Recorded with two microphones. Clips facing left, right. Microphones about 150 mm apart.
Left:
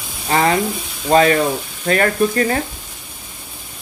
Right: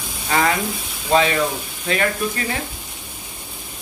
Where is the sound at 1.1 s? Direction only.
45° left (ahead or behind).